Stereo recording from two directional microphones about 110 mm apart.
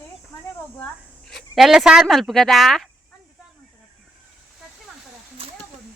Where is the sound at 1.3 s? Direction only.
Centre (ahead or behind).